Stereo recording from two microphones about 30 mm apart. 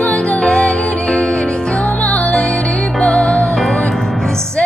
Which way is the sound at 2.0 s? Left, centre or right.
Left.